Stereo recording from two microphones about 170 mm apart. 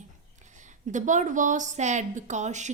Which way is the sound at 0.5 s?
45° right (ahead or behind).